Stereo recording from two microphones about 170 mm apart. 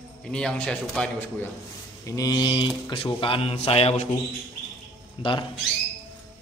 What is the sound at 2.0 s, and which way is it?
Mantra, 20° left (ahead or behind).